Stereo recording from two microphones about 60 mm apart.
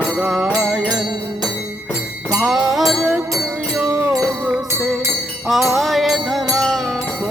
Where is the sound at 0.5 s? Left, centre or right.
Centre.